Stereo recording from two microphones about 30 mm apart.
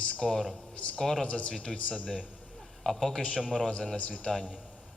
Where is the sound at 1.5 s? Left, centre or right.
Left.